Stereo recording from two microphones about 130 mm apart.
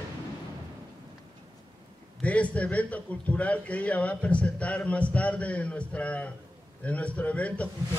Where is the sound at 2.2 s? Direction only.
10° left (ahead or behind).